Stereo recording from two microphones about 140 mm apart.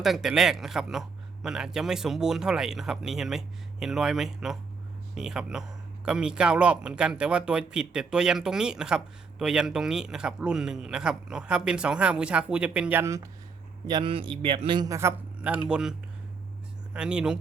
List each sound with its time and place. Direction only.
0.0 s a man's voice: centre (ahead or behind); by 13.2 s 20° right (ahead or behind)
13.8 s a man's voice: 35° right (ahead or behind)
14.8 s a man's voice: 20° right (ahead or behind)
15.4 s a man's voice: 10° right (ahead or behind)